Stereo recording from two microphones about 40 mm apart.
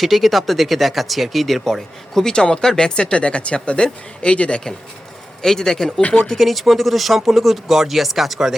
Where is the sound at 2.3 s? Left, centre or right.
Left.